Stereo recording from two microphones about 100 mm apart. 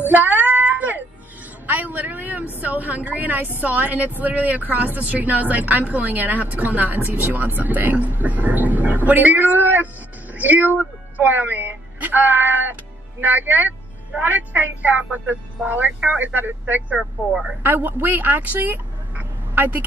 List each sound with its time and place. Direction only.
0.0 s music: 20° right (ahead or behind)
1.7 s a woman's voice: 15° right (ahead or behind)
17.3 s speech: 5° right (ahead or behind)
17.6 s speech: 20° right (ahead or behind)